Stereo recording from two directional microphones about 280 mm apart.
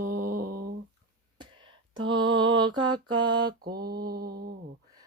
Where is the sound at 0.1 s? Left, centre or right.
Right.